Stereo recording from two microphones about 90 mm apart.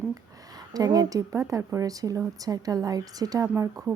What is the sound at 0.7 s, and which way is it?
A woman's voice, 45° right (ahead or behind).